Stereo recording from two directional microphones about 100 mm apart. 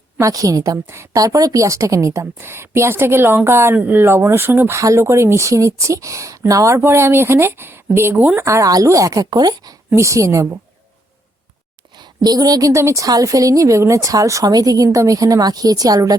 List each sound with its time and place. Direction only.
0.2 s a woman's voice: 35° right (ahead or behind)
11.9 s a woman's voice: 45° right (ahead or behind)